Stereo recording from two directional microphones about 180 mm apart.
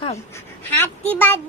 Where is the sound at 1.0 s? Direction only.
10° left (ahead or behind).